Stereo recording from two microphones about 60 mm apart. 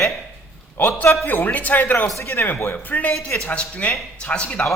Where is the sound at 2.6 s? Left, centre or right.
Left.